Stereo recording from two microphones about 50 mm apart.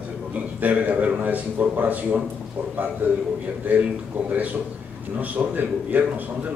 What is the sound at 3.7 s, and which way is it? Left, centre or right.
A man's voice, right.